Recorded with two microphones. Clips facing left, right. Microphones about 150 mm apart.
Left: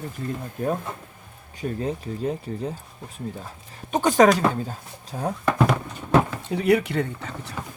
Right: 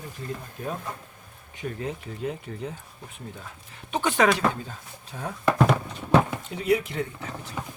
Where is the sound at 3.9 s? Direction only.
40° left (ahead or behind).